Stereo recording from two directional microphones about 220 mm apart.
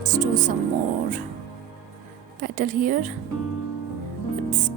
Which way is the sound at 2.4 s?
35° right (ahead or behind).